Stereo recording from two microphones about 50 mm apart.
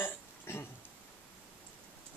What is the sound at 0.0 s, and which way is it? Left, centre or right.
Burping, left.